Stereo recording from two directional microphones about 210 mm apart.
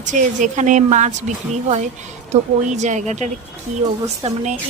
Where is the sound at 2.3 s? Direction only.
35° right (ahead or behind).